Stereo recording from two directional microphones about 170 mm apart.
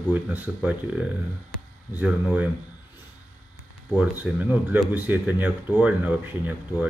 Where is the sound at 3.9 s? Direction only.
10° right (ahead or behind).